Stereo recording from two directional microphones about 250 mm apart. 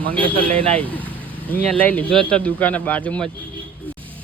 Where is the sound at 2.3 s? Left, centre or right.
Centre.